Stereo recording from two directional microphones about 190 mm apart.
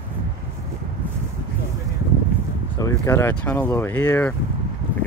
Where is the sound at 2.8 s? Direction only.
15° left (ahead or behind).